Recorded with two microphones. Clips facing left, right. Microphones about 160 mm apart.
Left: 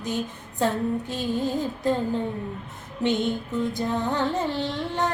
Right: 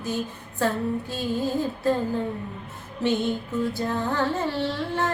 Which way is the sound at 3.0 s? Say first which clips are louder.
Even; 20° left (ahead or behind).